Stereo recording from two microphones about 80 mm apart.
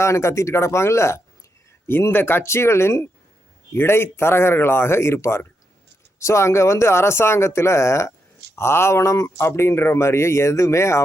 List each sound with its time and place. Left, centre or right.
0.0 s speech: left